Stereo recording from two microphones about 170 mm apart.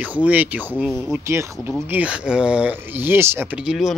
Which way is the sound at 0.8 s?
Centre (ahead or behind).